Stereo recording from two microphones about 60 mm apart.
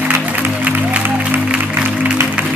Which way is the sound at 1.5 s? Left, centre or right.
Right.